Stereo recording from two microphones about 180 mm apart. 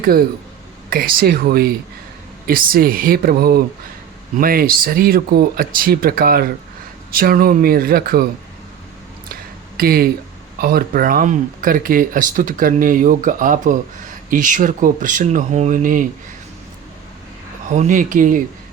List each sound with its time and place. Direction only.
0.9 s speech: 55° right (ahead or behind)
9.3 s a sound: 55° right (ahead or behind)
10.6 s speech: 55° right (ahead or behind)
17.7 s speech: 45° right (ahead or behind)